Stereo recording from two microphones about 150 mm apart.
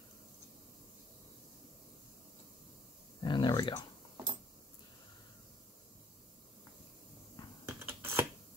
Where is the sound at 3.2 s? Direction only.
30° left (ahead or behind).